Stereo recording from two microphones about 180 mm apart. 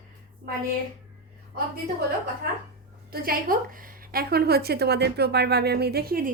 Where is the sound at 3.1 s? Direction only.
55° right (ahead or behind).